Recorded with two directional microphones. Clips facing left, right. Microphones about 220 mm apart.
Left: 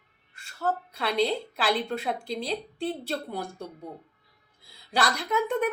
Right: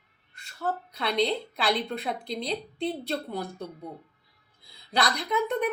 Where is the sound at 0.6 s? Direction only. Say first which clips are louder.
Left 2 dB; 5° left (ahead or behind).